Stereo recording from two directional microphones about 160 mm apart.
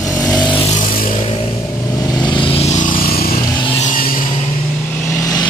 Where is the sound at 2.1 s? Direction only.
30° left (ahead or behind); by 4.3 s 60° left (ahead or behind).